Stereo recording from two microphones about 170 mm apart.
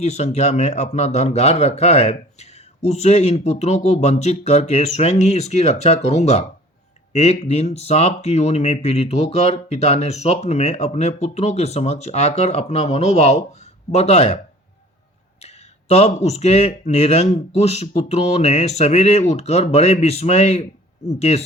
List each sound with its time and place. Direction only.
0.0 s a man's voice: 40° left (ahead or behind)
15.4 s a man's voice: 40° left (ahead or behind)